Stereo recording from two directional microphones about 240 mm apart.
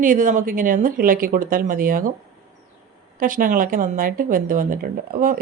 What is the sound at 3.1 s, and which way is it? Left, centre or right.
Speech, right.